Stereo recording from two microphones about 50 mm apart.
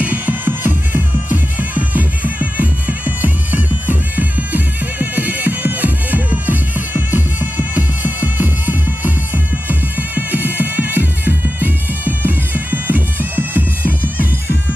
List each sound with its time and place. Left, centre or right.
0.0 s music: right